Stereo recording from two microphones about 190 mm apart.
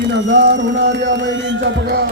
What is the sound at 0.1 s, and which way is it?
A man's voice, 65° right (ahead or behind).